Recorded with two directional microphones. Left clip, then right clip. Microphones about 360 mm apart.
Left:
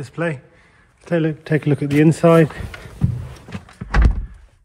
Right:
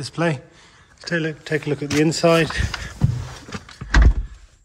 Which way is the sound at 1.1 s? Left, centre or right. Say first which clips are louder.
Left 3 dB; centre.